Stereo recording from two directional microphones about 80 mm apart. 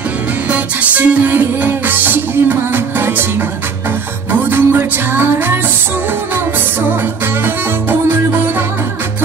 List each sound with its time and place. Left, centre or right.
0.5 s music: right
4.3 s music: right
7.4 s music: right